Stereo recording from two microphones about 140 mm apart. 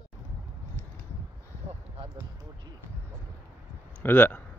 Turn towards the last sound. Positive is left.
turn(degrees=15)  # may be behind; listen again after turning